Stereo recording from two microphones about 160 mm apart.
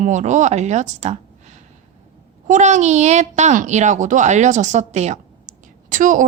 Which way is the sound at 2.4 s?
50° right (ahead or behind).